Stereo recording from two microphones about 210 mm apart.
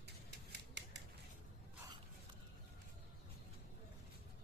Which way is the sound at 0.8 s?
55° right (ahead or behind).